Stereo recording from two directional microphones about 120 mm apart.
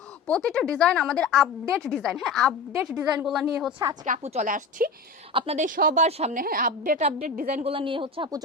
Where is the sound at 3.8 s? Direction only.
35° right (ahead or behind).